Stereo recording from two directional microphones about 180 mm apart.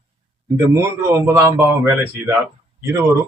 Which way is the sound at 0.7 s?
10° right (ahead or behind).